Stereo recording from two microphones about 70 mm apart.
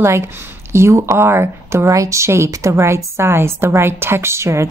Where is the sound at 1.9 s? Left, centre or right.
Right.